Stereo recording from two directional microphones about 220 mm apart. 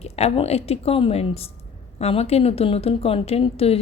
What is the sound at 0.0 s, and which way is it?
A woman's voice, 30° left (ahead or behind).